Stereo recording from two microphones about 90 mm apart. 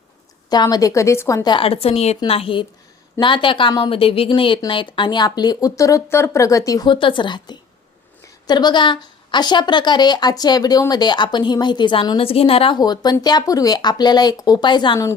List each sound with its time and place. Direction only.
0.5 s a woman's voice: 50° left (ahead or behind); by 1.5 s 35° left (ahead or behind)
1.5 s a woman's voice: 85° left
3.2 s a woman's voice: 65° left (ahead or behind); by 6.8 s 40° left (ahead or behind)
6.8 s a woman's voice: 65° left (ahead or behind); by 12.7 s 90° left
12.7 s speech: 50° left (ahead or behind)